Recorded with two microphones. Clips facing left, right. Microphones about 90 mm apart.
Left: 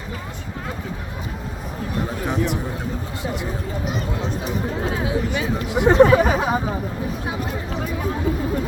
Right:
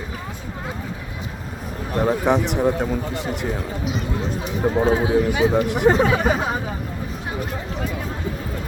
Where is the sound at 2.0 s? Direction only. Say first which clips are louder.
Right 8 dB; 65° right (ahead or behind).